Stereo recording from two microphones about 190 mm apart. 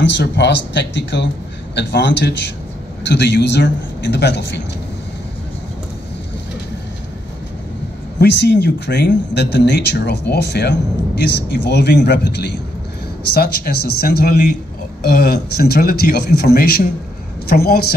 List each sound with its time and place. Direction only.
0.0 s speech: 65° left (ahead or behind)
8.2 s speech: 65° left (ahead or behind)